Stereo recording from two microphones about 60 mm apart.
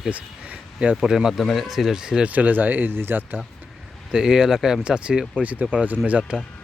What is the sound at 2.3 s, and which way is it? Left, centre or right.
Speech, right.